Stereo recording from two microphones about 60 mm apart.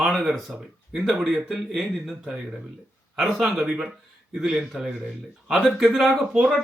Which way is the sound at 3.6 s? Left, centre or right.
Centre.